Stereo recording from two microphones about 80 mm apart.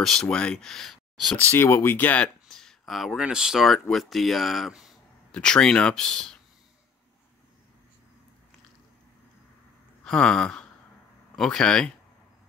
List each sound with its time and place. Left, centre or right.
0.0 s speech: centre
1.3 s speech: centre
1.6 s speech: left
2.4 s a sound: centre
3.2 s speech: centre
5.3 s speech: centre
10.0 s a sound: centre
11.3 s speech: centre